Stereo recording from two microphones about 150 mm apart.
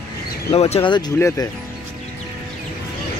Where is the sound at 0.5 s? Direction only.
45° left (ahead or behind).